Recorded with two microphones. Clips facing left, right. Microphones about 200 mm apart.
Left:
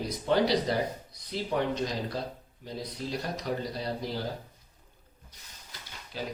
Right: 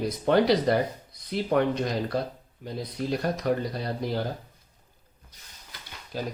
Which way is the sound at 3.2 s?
55° right (ahead or behind).